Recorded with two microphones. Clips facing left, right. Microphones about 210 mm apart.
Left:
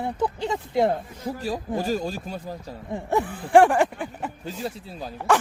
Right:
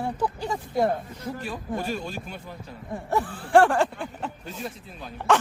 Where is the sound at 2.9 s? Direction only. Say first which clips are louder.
Left 2 dB; 20° left (ahead or behind).